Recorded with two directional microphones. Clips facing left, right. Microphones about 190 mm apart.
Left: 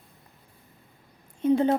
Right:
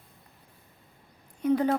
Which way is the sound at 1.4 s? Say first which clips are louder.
Left 3 dB; 25° left (ahead or behind).